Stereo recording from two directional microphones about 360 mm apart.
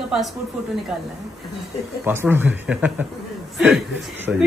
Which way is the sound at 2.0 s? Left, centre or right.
Centre.